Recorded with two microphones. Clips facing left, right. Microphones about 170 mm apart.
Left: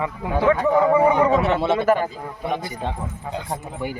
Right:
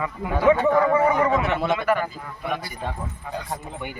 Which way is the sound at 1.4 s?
30° left (ahead or behind).